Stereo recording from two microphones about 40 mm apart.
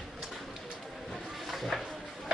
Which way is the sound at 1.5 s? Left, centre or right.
Centre.